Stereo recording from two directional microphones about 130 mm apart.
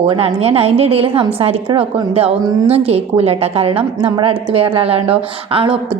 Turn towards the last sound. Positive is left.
turn(degrees=-45)  # may be behind; listen again after turning